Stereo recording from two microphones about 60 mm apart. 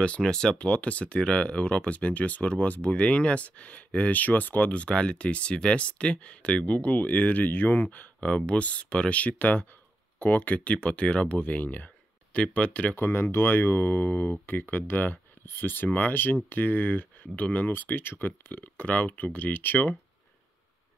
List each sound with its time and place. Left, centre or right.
0.0 s speech: centre
12.9 s speech: left